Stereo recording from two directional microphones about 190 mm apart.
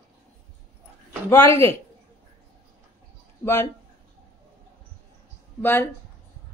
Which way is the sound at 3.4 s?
15° left (ahead or behind).